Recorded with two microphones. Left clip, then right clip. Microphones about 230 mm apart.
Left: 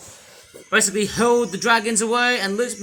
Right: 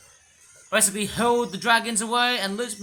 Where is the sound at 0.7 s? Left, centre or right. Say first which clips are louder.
Left 5 dB; centre.